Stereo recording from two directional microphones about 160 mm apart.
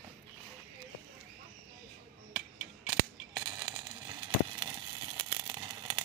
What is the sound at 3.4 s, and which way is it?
Coin, 25° right (ahead or behind).